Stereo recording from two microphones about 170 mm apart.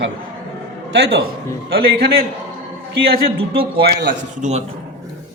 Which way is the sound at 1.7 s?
65° right (ahead or behind).